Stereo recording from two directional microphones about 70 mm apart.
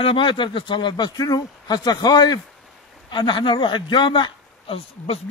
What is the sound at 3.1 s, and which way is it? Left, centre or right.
A man's voice, left.